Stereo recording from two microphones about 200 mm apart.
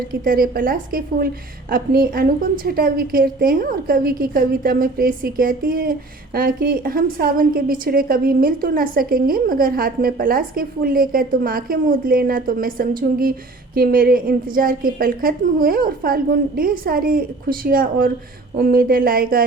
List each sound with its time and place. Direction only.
0.1 s a woman's voice: 45° right (ahead or behind)